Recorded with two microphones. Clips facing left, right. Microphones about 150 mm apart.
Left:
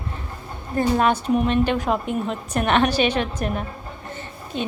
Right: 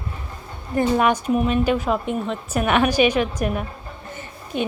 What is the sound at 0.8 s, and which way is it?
A woman's voice, 15° right (ahead or behind).